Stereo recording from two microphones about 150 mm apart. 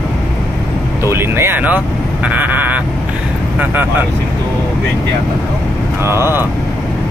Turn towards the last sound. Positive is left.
turn(degrees=-15)  # may be behind; listen again after turning